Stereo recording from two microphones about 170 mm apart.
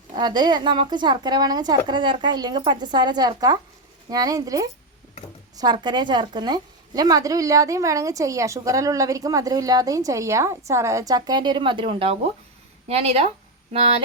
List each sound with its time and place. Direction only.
0.1 s a woman's voice: 25° right (ahead or behind)